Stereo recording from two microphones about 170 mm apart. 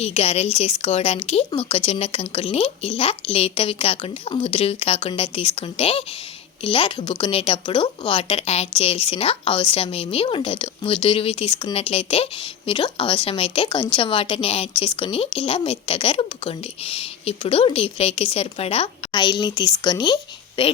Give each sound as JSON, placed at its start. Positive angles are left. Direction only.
{"t": 0.0, "sound": "speech", "side_deg": 40}